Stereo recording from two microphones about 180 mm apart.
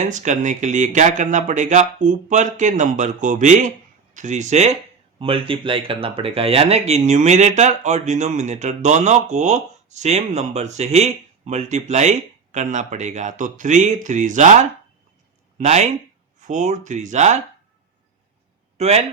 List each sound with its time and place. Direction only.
0.0 s speech: 40° right (ahead or behind)
18.8 s speech: 35° right (ahead or behind)